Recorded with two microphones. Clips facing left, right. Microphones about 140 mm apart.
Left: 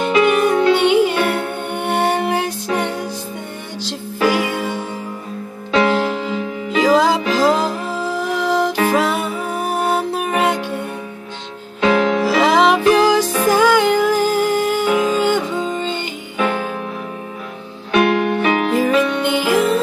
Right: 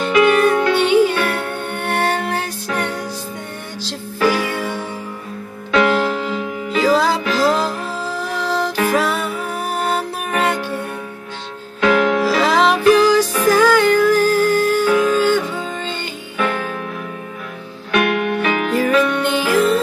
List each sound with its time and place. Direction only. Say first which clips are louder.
0.0 s music: right 1 dB; 20° left (ahead or behind)
11.8 s music: even; 30° left (ahead or behind)
12.3 s music: left 2 dB; 20° left (ahead or behind)
16.4 s music: left 2 dB; 30° left (ahead or behind)
17.9 s music: left 2 dB; 30° left (ahead or behind)
18.7 s music: even; 20° left (ahead or behind)